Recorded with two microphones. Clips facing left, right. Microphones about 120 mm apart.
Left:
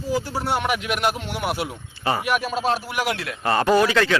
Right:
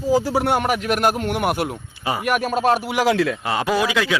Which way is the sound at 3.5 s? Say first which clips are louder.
Left 2 dB; 10° right (ahead or behind).